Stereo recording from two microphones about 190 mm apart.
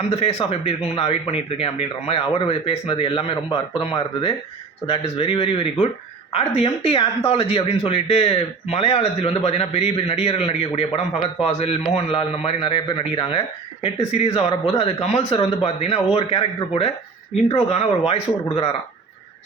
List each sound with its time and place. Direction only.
0.1 s speech: 30° left (ahead or behind)